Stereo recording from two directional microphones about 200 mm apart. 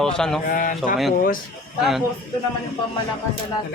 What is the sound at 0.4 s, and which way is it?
Speech, 40° left (ahead or behind).